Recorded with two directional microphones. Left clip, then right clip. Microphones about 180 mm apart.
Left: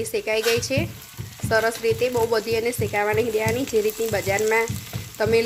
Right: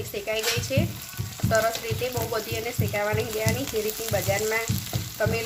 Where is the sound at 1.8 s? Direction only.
40° left (ahead or behind).